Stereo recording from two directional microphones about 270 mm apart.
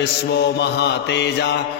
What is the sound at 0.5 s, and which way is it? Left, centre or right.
Mantra, left.